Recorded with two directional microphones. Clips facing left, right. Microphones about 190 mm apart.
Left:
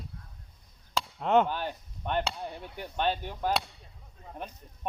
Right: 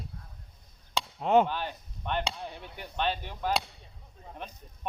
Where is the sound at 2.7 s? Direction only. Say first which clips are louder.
Left 2 dB; 45° left (ahead or behind).